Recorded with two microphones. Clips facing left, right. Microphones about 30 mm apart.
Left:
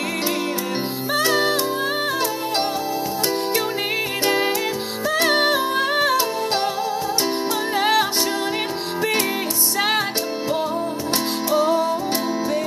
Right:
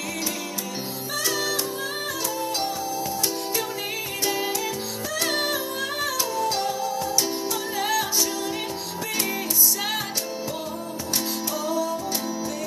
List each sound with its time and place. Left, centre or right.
1.1 s music: left
5.1 s music: left
7.8 s music: left
9.8 s music: left
11.5 s music: left